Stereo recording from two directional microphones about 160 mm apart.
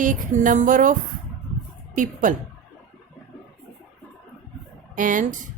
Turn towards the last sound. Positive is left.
turn(degrees=-55)  # may be behind; listen again after turning